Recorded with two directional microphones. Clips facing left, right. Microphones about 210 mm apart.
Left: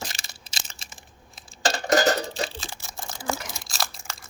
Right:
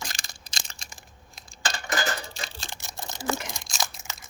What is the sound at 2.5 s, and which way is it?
Camera, centre (ahead or behind).